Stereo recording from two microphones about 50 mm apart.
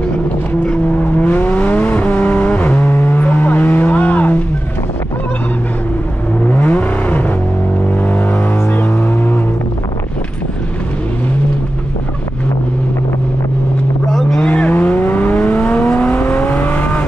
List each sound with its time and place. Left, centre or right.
1.1 s vehicle: left
6.4 s vehicle: left
14.4 s vehicle: left